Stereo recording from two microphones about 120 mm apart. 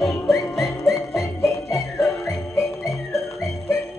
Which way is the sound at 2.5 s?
25° left (ahead or behind).